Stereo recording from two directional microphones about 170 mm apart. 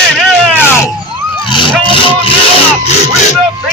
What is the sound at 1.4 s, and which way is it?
Vehicle, 30° left (ahead or behind).